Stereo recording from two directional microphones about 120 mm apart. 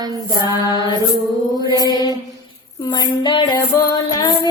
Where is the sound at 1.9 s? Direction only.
35° right (ahead or behind).